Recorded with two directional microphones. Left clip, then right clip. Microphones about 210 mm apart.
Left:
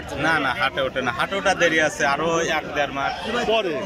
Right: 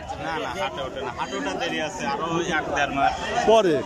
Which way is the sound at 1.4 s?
50° left (ahead or behind).